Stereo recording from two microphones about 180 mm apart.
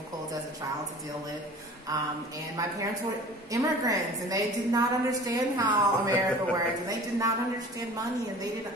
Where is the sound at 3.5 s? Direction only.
20° right (ahead or behind).